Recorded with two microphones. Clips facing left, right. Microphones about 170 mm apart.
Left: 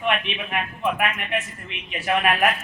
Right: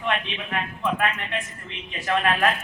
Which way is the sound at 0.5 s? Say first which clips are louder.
Left 1 dB; 15° left (ahead or behind).